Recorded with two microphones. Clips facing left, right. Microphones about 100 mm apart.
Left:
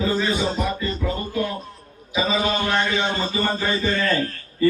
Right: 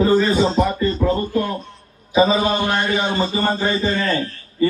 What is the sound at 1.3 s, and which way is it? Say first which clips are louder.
Speech: right 4 dB; 45° right (ahead or behind).